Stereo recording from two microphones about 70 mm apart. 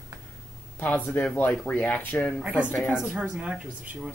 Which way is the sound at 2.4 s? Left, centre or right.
Centre.